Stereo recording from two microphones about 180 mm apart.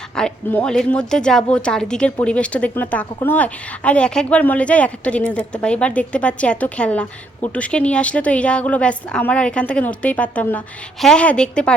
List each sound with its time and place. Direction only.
0.2 s a woman's voice: 5° left (ahead or behind)